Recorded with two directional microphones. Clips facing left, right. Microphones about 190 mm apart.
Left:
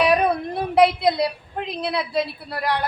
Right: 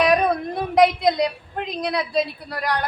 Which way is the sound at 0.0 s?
5° left (ahead or behind).